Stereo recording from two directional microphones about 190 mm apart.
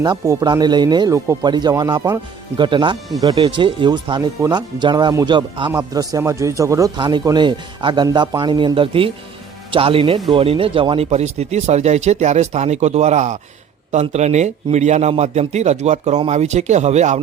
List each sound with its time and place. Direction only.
0.0 s a man's voice: 20° right (ahead or behind); by 17.2 s 35° right (ahead or behind)